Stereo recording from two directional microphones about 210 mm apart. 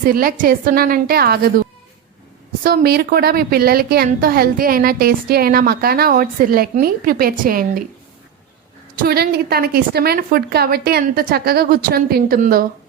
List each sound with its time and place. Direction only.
0.1 s a woman's voice: 45° right (ahead or behind)
2.6 s a woman's voice: 50° right (ahead or behind)
9.0 s a woman's voice: 50° right (ahead or behind)